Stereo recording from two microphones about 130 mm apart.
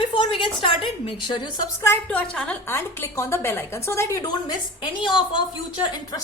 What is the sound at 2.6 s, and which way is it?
A woman's voice, 20° left (ahead or behind).